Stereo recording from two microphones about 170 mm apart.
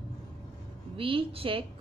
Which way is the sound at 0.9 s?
30° right (ahead or behind).